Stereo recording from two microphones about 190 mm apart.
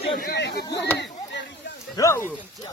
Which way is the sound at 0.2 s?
55° left (ahead or behind).